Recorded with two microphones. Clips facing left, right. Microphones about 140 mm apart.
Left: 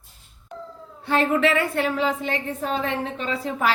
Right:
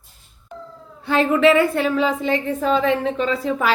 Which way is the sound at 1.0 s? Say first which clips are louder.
Right 4 dB; 90° right.